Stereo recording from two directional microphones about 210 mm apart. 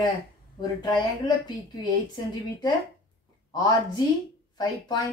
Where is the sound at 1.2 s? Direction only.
20° left (ahead or behind).